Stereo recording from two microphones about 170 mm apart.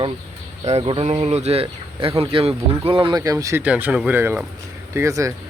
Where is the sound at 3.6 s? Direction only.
10° right (ahead or behind).